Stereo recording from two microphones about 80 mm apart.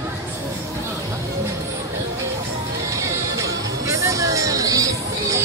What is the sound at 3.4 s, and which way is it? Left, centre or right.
Music, right.